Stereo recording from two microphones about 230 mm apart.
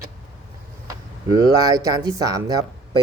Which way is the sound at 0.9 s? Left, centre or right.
Centre.